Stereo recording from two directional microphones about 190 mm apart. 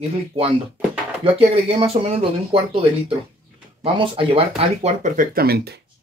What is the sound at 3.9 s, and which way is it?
Speech, 30° right (ahead or behind).